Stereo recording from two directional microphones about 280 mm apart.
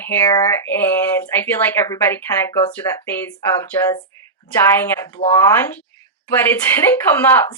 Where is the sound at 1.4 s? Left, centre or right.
Centre.